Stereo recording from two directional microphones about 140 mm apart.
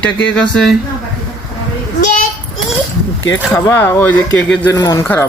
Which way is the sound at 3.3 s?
15° left (ahead or behind).